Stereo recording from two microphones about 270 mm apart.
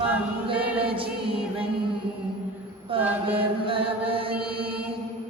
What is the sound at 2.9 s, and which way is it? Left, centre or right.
Chant, centre.